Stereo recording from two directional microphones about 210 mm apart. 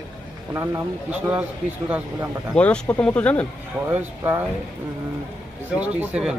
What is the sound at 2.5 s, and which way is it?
Speech, 5° left (ahead or behind).